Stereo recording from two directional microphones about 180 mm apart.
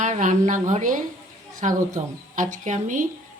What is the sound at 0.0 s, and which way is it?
A woman's voice, 45° right (ahead or behind).